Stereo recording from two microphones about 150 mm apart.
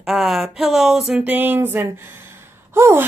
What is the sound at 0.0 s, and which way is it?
Speech, centre (ahead or behind).